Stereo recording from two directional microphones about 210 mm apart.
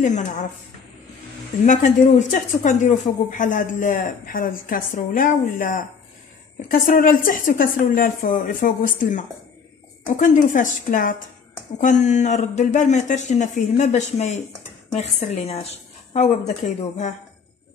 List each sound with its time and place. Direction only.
0.0 s speech: 35° left (ahead or behind)
1.7 s speech: 35° left (ahead or behind)